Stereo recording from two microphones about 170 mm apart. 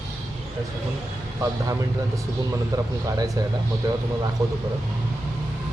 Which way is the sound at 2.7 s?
20° right (ahead or behind).